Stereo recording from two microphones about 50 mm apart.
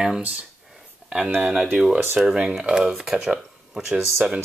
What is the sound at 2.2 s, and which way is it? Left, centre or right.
Speech, centre.